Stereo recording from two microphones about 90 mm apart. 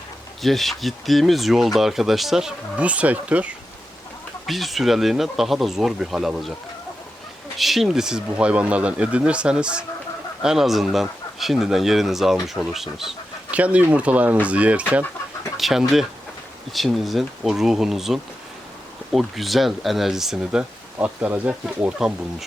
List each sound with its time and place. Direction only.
0.4 s speech: centre (ahead or behind); by 3.5 s 15° right (ahead or behind)
4.4 s speech: centre (ahead or behind)
7.6 s speech: centre (ahead or behind)
13.5 s speech: 15° right (ahead or behind)
15.5 s speech: 5° right (ahead or behind)